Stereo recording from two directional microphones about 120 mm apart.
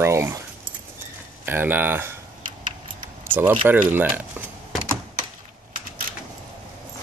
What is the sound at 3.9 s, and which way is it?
Speech, 15° right (ahead or behind).